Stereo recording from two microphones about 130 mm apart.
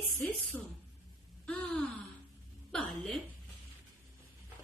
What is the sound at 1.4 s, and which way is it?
A woman's voice, 5° left (ahead or behind).